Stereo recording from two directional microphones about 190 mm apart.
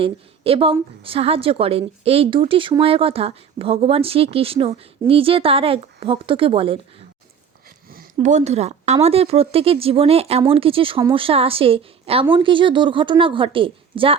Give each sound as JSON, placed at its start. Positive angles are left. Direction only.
{"t": 0.0, "sound": "a woman's voice", "side_deg": -30}
{"t": 7.9, "sound": "a sound", "side_deg": -45}
{"t": 9.0, "sound": "a woman's voice", "side_deg": -30}